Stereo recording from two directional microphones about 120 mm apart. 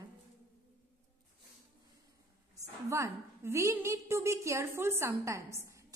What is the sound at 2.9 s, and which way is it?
A woman's voice, 25° right (ahead or behind).